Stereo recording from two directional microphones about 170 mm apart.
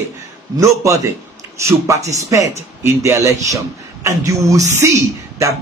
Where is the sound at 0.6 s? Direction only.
20° right (ahead or behind).